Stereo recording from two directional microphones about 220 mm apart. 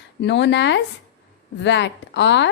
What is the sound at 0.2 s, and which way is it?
A woman's voice, 50° left (ahead or behind).